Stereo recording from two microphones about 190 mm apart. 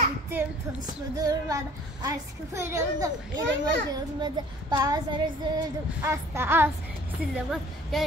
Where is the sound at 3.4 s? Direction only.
65° right (ahead or behind).